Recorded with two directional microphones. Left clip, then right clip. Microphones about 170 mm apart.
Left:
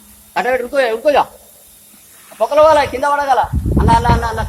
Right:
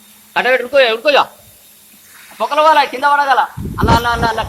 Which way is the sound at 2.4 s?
25° left (ahead or behind).